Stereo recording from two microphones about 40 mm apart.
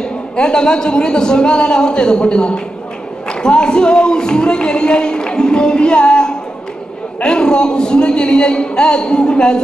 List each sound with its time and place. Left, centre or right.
0.0 s speech: centre